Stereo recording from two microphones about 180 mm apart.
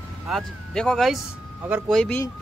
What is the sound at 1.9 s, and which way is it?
Speech, 5° left (ahead or behind).